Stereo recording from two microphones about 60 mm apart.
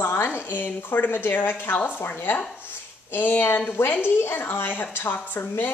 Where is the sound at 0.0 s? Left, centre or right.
Left.